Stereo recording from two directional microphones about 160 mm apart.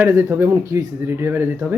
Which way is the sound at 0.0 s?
15° right (ahead or behind).